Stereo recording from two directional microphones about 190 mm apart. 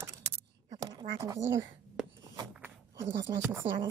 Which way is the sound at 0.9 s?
20° right (ahead or behind).